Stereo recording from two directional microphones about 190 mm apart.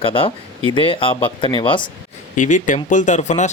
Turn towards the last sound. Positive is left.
turn(degrees=35)  # may be behind; listen again after turning